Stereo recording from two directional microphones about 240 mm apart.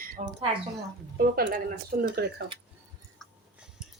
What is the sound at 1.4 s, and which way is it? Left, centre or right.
Speech, right.